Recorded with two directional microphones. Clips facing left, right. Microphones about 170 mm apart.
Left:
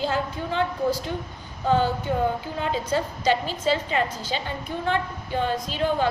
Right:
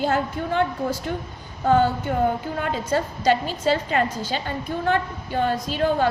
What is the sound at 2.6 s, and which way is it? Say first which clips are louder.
A woman's voice: even; 50° right (ahead or behind).